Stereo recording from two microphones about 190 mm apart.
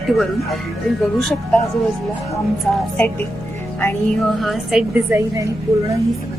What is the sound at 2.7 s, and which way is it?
Speech, 10° left (ahead or behind).